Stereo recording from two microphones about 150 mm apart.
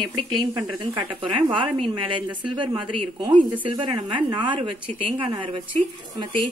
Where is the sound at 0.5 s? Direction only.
35° right (ahead or behind).